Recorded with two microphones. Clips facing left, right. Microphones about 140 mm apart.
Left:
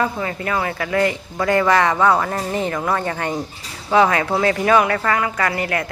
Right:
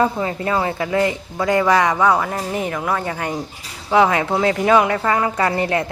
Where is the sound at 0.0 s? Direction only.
20° right (ahead or behind).